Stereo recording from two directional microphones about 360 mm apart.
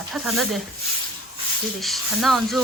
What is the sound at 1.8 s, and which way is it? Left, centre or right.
Speech, centre.